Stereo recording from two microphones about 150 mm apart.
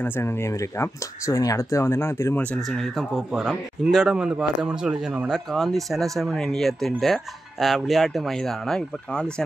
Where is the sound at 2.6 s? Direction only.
Centre (ahead or behind).